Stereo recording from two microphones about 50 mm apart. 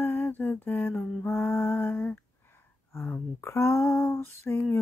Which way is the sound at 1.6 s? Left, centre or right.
Left.